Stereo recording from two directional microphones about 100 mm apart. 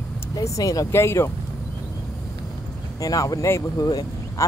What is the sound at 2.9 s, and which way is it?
Speech, 35° left (ahead or behind).